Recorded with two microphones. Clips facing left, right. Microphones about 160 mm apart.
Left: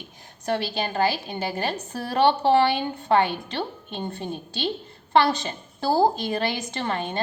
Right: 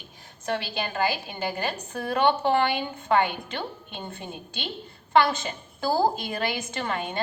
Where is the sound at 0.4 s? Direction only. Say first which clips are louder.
Left 3 dB; 40° left (ahead or behind).